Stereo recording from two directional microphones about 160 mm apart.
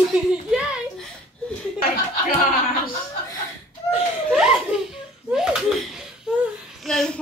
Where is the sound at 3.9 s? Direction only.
5° right (ahead or behind).